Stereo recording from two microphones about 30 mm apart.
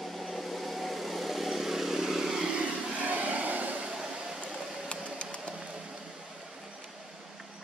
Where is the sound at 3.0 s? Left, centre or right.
Right.